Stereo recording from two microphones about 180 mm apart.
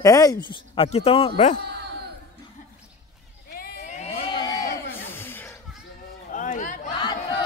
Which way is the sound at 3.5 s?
55° left (ahead or behind).